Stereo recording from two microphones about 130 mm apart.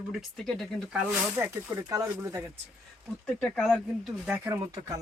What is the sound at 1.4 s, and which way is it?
Speech, 20° right (ahead or behind).